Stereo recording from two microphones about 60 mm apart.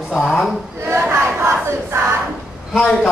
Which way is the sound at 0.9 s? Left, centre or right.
Right.